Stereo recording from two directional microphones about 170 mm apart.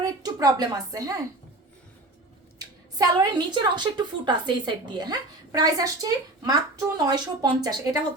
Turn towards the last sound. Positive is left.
turn(degrees=-20)  # may be behind; listen again after turning